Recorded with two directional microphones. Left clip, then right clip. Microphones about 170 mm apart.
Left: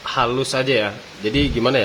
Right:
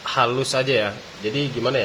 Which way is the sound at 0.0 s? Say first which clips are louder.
Left 1 dB; 10° left (ahead or behind).